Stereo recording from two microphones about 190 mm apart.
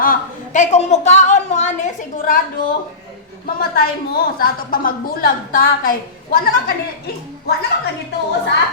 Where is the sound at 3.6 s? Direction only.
55° left (ahead or behind).